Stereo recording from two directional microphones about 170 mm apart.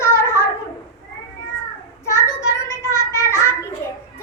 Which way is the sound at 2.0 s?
15° left (ahead or behind).